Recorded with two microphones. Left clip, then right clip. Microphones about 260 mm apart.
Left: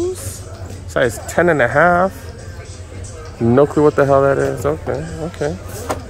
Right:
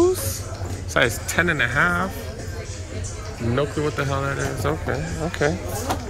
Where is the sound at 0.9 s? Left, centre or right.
Centre.